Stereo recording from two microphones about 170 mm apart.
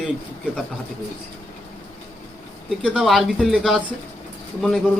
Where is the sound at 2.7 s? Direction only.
5° right (ahead or behind).